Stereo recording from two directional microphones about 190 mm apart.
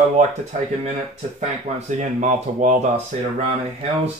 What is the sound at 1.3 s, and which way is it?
Speech, 40° right (ahead or behind).